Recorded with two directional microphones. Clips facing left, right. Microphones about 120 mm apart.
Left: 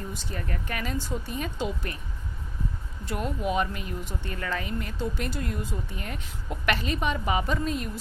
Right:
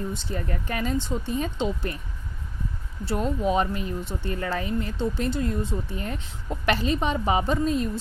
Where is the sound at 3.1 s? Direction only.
30° right (ahead or behind).